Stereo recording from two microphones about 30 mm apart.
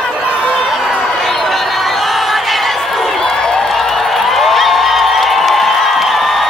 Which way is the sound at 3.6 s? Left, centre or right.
Centre.